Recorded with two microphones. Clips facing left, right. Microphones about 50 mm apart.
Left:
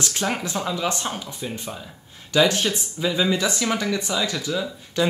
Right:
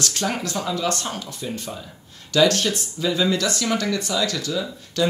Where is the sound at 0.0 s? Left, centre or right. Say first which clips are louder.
Even; centre.